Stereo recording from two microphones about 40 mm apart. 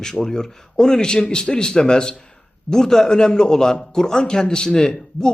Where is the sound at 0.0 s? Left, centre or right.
Centre.